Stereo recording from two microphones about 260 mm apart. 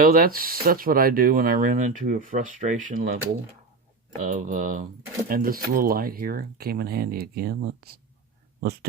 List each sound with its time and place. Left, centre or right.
0.0 s speech: right
4.2 s speech: right